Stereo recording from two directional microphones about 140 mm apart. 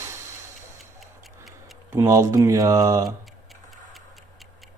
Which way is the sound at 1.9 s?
20° right (ahead or behind).